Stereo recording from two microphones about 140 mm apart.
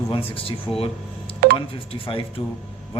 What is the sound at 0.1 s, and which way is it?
Speech, 40° left (ahead or behind).